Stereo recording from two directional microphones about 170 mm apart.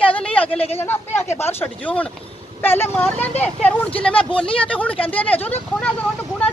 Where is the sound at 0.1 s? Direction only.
10° left (ahead or behind).